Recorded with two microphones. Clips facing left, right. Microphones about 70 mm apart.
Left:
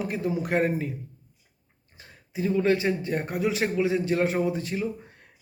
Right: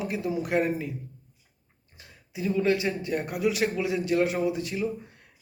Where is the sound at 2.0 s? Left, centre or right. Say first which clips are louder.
Left 3 dB; left.